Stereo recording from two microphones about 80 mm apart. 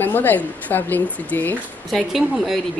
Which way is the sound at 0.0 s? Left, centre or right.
Left.